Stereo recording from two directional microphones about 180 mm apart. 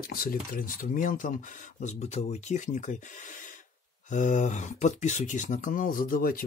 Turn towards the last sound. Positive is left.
turn(degrees=55)  # may be behind; listen again after turning